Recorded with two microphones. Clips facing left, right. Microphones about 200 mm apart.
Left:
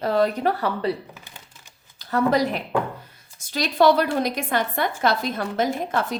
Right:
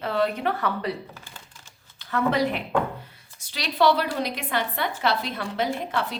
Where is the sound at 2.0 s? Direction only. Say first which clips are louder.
Left 3 dB; 40° left (ahead or behind).